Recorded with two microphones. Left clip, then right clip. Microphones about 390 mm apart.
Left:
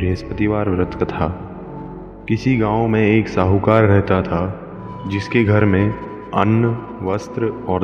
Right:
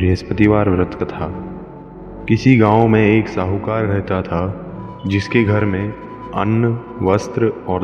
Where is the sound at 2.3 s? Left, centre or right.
Right.